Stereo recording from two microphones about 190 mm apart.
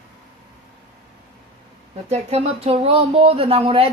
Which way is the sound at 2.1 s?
35° right (ahead or behind).